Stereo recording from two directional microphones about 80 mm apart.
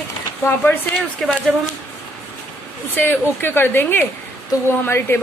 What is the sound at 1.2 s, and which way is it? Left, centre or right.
Speech, centre.